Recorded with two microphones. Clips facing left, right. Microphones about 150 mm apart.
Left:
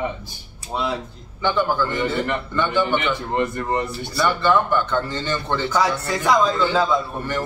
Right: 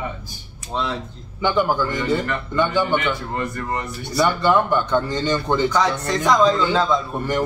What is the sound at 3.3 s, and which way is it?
Speech, 25° left (ahead or behind).